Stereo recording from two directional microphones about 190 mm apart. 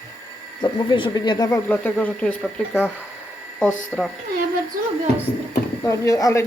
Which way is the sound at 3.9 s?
5° left (ahead or behind).